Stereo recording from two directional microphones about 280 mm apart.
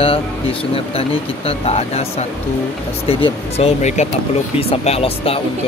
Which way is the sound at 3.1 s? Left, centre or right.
Centre.